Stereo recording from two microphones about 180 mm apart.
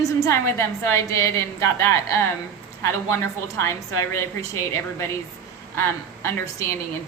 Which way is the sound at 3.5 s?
15° left (ahead or behind).